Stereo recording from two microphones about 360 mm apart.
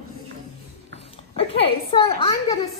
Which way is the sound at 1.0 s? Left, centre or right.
Centre.